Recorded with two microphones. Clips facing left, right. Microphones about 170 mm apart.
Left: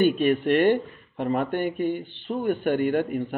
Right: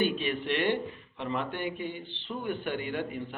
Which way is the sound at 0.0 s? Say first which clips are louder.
Left 9 dB; 50° left (ahead or behind).